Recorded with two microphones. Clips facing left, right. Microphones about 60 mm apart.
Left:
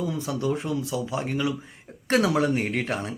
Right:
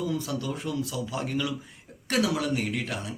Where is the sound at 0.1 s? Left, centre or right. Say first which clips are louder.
Left 4 dB; left.